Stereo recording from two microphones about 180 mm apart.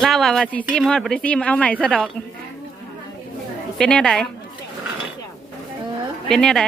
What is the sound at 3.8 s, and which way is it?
Speech, 5° left (ahead or behind).